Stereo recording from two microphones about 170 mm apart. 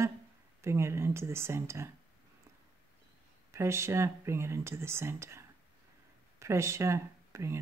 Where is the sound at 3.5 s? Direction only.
15° right (ahead or behind).